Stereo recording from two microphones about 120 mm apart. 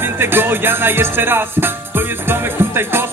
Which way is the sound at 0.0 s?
20° right (ahead or behind).